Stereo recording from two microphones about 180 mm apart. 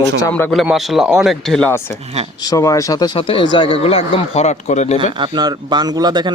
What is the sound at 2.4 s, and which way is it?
A man's voice, 20° left (ahead or behind).